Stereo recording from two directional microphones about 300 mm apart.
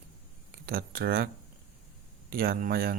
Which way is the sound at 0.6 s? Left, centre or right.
Right.